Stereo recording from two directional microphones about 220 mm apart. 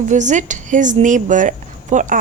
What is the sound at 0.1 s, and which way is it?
Speech, 35° right (ahead or behind).